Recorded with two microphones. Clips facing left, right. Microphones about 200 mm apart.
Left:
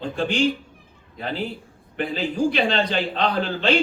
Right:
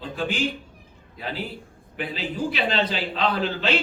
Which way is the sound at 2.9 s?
50° left (ahead or behind).